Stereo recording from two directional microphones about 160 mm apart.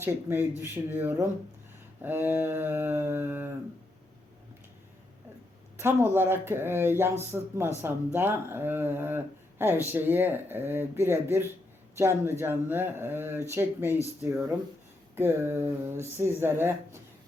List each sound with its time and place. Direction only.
0.0 s speech: 15° right (ahead or behind)
5.8 s speech: 15° right (ahead or behind)